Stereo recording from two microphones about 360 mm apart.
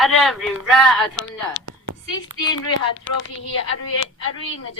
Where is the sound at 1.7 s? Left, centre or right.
Right.